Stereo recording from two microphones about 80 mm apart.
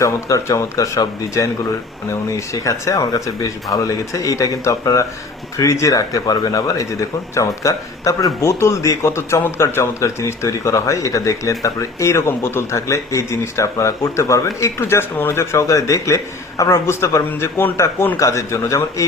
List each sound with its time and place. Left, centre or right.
0.0 s speech: left